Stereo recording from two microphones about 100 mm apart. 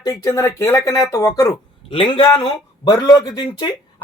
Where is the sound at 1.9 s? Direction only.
65° left (ahead or behind).